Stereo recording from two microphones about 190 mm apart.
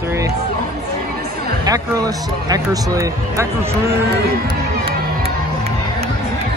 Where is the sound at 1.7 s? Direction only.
20° right (ahead or behind).